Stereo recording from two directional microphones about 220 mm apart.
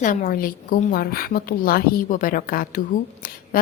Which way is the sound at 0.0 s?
35° left (ahead or behind).